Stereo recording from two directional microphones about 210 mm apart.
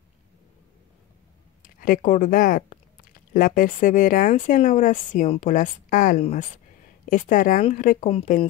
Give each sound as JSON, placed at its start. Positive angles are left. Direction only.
{"t": 1.6, "sound": "speech", "side_deg": 40}
{"t": 8.1, "sound": "speech", "side_deg": 25}